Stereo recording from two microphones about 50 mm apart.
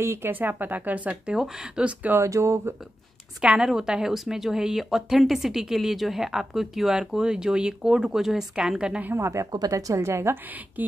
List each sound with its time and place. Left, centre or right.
0.0 s speech: right
0.3 s speech: right
1.3 s a woman's voice: centre
2.1 s a woman's voice: right
3.4 s a woman's voice: centre
9.1 s a woman's voice: right
10.8 s speech: right